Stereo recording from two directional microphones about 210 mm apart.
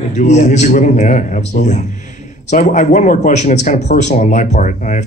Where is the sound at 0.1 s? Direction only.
35° left (ahead or behind).